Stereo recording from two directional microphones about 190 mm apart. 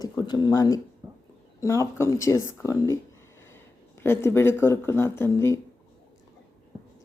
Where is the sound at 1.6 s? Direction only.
15° left (ahead or behind).